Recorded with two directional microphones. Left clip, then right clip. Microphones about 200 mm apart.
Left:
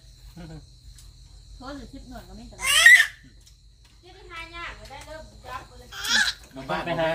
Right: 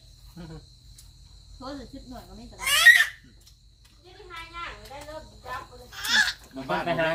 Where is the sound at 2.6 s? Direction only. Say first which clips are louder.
Left 2 dB; 25° left (ahead or behind).